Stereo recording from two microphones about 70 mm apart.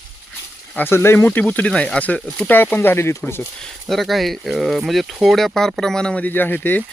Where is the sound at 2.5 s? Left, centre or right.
Left.